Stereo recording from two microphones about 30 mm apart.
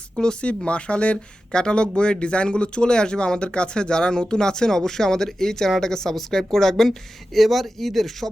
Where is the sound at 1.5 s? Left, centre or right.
Left; by 8.3 s centre.